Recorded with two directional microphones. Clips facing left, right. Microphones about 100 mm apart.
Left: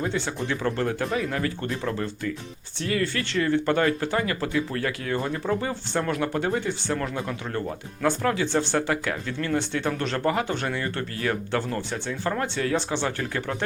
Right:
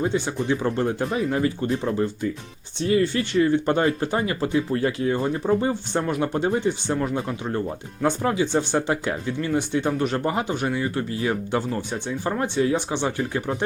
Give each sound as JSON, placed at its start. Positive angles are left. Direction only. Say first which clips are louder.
{"t": 0.0, "sound": "speech", "louder": "right 4 dB", "side_deg": -20}